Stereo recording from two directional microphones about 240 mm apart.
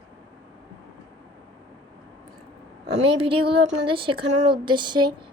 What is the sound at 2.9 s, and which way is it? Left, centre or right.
A woman's voice, right.